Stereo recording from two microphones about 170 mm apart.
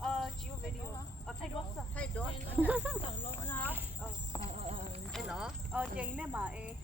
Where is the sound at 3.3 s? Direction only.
15° left (ahead or behind).